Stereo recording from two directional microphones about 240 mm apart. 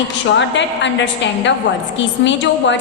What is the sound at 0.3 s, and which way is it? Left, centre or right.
A woman's voice, left.